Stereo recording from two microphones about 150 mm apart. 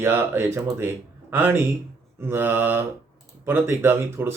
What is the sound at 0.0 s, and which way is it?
Speech, 15° right (ahead or behind).